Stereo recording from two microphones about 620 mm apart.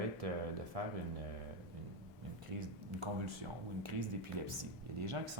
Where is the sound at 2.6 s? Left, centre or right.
Right.